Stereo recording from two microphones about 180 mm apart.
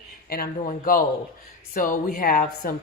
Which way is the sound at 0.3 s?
55° left (ahead or behind).